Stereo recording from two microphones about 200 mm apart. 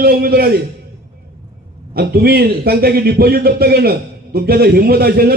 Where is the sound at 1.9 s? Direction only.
50° right (ahead or behind).